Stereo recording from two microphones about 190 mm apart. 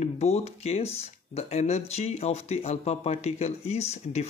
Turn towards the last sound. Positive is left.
turn(degrees=35)  # may be behind; listen again after turning